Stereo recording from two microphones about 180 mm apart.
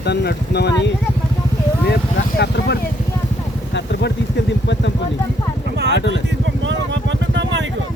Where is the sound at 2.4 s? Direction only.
65° left (ahead or behind).